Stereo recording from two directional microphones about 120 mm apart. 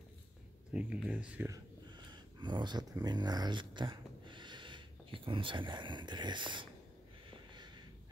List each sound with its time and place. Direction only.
0.7 s speech: 10° right (ahead or behind)
1.5 s speech: 40° right (ahead or behind)
7.5 s a sound: 40° right (ahead or behind)